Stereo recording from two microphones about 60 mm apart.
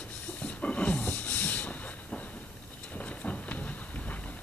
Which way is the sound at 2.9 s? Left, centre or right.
Left.